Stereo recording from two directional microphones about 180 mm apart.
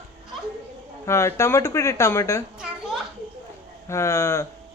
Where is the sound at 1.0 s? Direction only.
15° left (ahead or behind).